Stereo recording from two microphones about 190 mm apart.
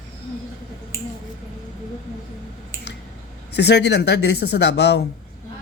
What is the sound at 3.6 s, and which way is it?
Speech, 65° left (ahead or behind).